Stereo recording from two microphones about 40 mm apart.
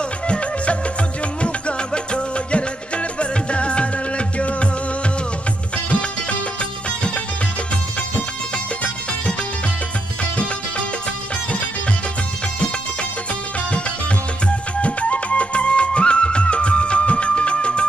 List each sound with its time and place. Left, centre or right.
0.3 s music: left
14.8 s music: left